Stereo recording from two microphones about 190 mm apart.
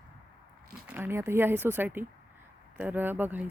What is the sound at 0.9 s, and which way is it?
Speech, 10° right (ahead or behind).